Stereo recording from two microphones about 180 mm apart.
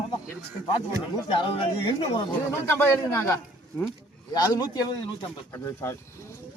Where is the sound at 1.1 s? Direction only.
30° left (ahead or behind).